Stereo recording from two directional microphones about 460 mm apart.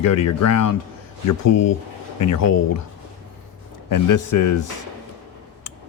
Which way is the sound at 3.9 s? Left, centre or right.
Left.